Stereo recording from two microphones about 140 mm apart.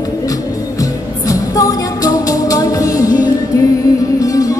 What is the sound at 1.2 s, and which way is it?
Music, 25° left (ahead or behind).